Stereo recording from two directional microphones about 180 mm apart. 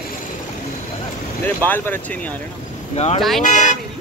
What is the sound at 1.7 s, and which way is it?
Speech, 10° left (ahead or behind).